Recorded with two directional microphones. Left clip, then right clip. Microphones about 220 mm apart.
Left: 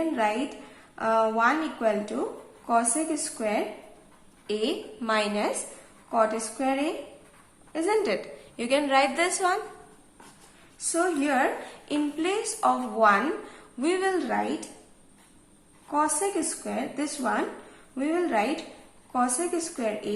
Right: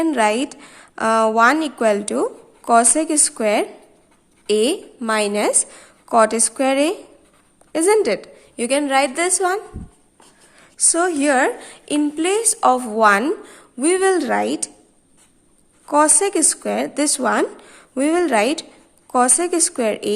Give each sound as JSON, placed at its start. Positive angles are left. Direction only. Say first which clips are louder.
{"t": 0.1, "sound": "a woman's voice", "louder": "right 9 dB", "side_deg": -50}
{"t": 10.8, "sound": "a woman's voice", "louder": "right 8 dB", "side_deg": -50}
{"t": 15.9, "sound": "a woman's voice", "louder": "right 10 dB", "side_deg": -50}